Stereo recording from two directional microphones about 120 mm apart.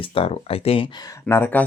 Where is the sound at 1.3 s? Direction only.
15° left (ahead or behind).